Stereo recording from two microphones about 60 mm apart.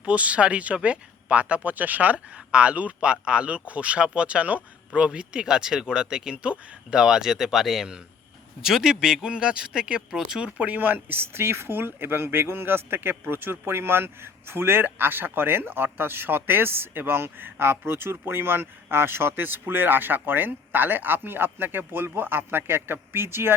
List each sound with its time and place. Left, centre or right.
0.0 s speech: right
10.6 s speech: right